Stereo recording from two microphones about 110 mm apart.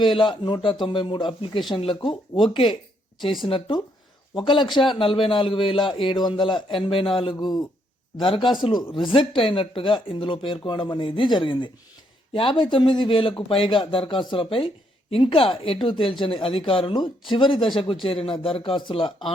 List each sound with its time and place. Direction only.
0.0 s a man's voice: 45° left (ahead or behind)
7.3 s speech: 40° left (ahead or behind)
8.2 s a man's voice: 50° left (ahead or behind)